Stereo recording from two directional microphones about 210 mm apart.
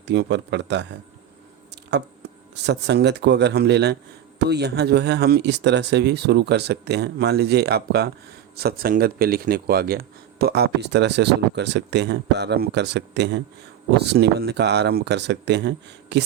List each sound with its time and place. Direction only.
0.1 s speech: 55° right (ahead or behind)
2.6 s speech: 55° right (ahead or behind)